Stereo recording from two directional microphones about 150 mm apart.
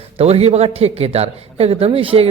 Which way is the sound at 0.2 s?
45° right (ahead or behind).